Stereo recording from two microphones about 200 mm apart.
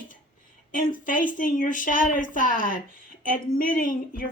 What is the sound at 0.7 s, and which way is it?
A woman's voice, 40° left (ahead or behind).